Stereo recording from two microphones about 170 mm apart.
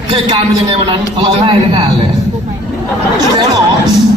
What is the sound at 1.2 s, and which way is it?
Speech, 35° right (ahead or behind).